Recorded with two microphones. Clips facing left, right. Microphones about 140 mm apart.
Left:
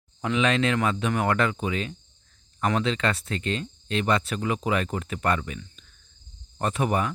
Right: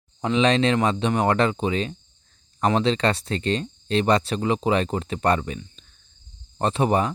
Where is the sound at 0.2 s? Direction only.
30° right (ahead or behind).